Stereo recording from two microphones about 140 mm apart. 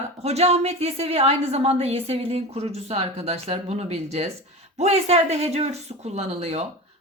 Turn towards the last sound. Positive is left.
turn(degrees=-45)  # may be behind; listen again after turning